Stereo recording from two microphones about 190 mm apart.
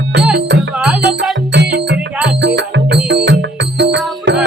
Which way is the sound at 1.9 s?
5° right (ahead or behind).